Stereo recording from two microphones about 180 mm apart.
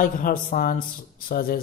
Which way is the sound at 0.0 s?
45° left (ahead or behind).